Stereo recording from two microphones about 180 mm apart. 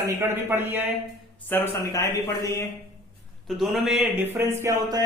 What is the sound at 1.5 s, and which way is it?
Speech, 15° left (ahead or behind).